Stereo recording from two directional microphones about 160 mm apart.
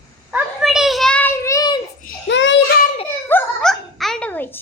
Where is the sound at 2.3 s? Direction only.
90° left.